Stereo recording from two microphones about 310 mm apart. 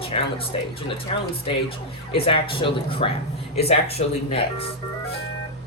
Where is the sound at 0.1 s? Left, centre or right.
Centre.